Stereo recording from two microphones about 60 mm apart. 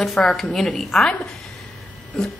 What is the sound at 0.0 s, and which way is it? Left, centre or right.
A woman's voice, centre.